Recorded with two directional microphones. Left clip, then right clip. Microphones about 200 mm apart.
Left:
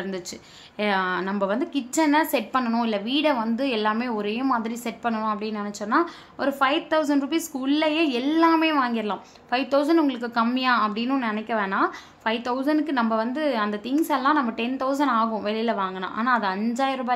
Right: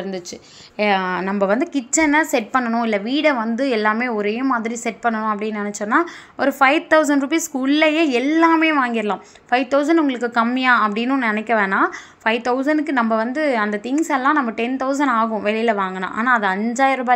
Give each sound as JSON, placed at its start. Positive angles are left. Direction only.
{"t": 0.7, "sound": "a woman's voice", "side_deg": -20}